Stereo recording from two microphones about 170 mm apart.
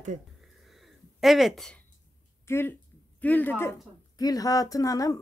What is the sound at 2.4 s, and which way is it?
Speech, 15° left (ahead or behind).